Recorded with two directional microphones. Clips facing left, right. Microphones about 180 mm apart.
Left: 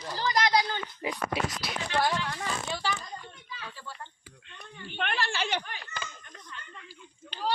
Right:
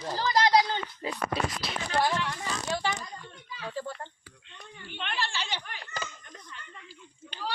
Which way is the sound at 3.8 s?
40° right (ahead or behind).